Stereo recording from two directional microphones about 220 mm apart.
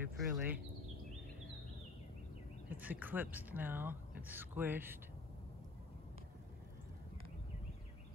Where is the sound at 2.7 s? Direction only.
10° right (ahead or behind).